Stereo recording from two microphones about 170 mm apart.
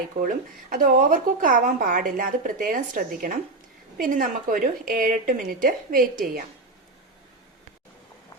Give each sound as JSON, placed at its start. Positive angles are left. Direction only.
{"t": 0.7, "sound": "a woman's voice", "side_deg": -55}